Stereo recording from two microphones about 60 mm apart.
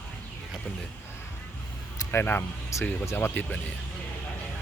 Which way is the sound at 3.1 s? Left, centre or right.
Left.